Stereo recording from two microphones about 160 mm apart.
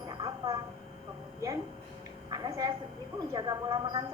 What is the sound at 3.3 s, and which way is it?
Speech, 25° right (ahead or behind).